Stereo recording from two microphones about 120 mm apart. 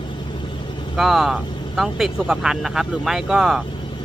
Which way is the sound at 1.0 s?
Centre (ahead or behind).